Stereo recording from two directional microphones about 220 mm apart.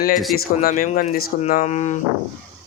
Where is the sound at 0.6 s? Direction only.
40° left (ahead or behind).